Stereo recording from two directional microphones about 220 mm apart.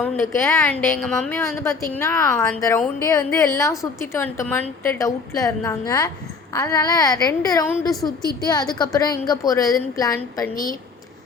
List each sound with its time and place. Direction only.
0.0 s a woman's voice: 10° left (ahead or behind)